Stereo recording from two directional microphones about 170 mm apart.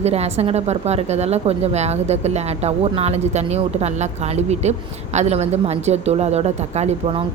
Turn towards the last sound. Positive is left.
turn(degrees=-35)  # may be behind; listen again after turning